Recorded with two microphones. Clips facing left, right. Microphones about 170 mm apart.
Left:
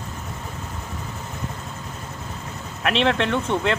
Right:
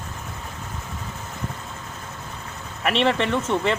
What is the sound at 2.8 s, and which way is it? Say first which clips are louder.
Speech: even; centre (ahead or behind).